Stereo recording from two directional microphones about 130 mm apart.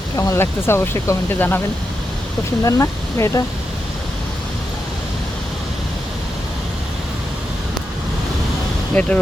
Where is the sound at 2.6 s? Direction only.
25° left (ahead or behind).